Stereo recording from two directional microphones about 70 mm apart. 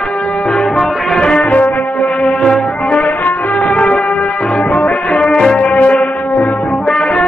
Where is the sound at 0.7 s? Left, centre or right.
Centre.